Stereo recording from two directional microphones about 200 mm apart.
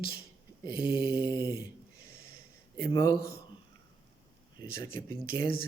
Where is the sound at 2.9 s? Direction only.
20° left (ahead or behind).